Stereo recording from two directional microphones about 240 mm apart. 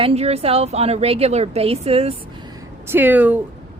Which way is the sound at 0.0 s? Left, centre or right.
Right.